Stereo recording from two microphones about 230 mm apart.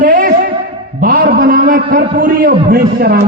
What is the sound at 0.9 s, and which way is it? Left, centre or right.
A man's voice, right.